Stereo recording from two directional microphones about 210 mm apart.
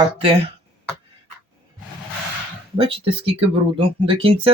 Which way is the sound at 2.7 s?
25° right (ahead or behind).